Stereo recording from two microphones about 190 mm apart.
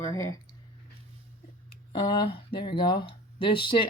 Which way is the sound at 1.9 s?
25° left (ahead or behind).